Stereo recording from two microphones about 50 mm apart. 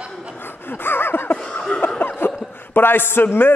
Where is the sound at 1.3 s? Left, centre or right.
Centre.